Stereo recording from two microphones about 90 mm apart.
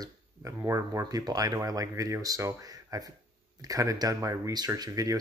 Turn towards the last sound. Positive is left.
turn(degrees=-40)  # may be behind; listen again after turning